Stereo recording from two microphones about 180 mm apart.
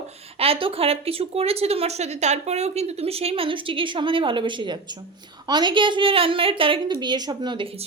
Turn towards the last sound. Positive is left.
turn(degrees=-25)  # may be behind; listen again after turning